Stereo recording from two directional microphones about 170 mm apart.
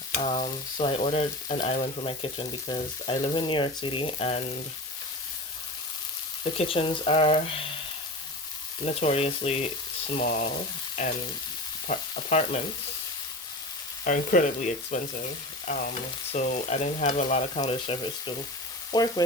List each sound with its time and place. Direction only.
0.2 s frying: 35° left (ahead or behind)
6.4 s frying: 35° left (ahead or behind)
9.0 s frying: 40° left (ahead or behind)
10.2 s frying: 70° left (ahead or behind)
11.9 s frying: 45° left (ahead or behind)
14.0 s speech: 50° left (ahead or behind)
16.3 s frying: 45° left (ahead or behind); by 19.1 s 25° left (ahead or behind)